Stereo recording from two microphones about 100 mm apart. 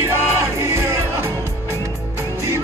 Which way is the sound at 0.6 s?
30° right (ahead or behind).